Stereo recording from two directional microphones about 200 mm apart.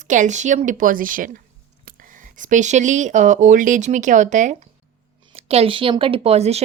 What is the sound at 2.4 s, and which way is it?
Speech, 40° right (ahead or behind).